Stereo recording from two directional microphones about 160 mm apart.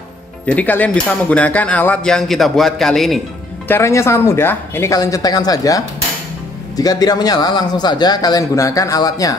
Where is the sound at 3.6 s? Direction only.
15° left (ahead or behind).